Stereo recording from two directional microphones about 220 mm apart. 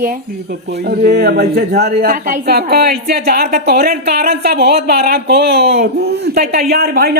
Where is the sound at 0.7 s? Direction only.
45° right (ahead or behind).